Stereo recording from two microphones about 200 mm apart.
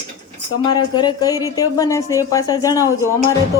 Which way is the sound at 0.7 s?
20° left (ahead or behind).